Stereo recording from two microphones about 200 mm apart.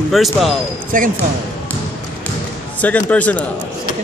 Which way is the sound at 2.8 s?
5° left (ahead or behind).